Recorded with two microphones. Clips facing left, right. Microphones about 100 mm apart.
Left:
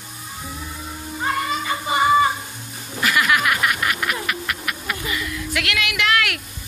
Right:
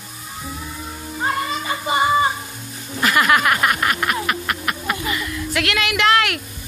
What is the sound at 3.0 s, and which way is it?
Snicker, 40° right (ahead or behind).